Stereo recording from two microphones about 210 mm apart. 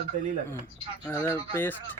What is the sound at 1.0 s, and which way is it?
Speech, 10° left (ahead or behind).